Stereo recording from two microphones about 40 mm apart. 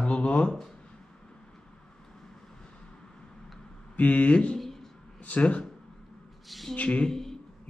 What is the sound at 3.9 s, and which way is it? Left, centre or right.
A man's voice, left.